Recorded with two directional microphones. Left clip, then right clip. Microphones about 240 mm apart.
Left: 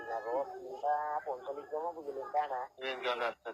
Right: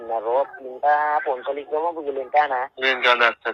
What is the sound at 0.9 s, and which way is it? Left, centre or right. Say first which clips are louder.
Speech: right 15 dB; right.